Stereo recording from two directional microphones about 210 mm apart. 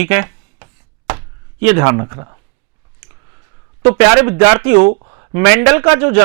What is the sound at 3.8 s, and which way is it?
Speech, 10° right (ahead or behind).